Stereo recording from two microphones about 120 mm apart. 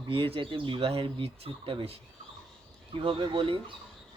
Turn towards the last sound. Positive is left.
turn(degrees=-50)  # may be behind; listen again after turning